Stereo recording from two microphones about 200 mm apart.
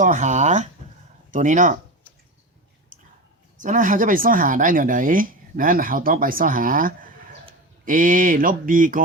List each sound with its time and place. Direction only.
0.0 s speech: 40° right (ahead or behind)
2.9 s a sound: 40° right (ahead or behind)
3.6 s speech: 40° right (ahead or behind)